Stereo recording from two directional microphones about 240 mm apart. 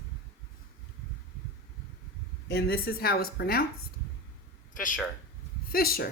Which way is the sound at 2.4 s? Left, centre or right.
Left.